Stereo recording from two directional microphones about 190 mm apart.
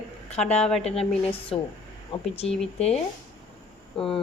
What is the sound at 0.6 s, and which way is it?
Speech, 5° left (ahead or behind).